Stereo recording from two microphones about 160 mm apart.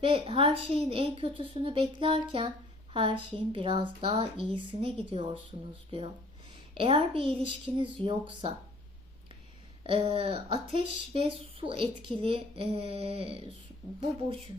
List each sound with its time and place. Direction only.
0.0 s speech: 35° right (ahead or behind)
6.5 s speech: 30° right (ahead or behind)
9.8 s speech: 35° right (ahead or behind)